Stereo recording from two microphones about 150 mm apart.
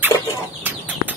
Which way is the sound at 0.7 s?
10° right (ahead or behind).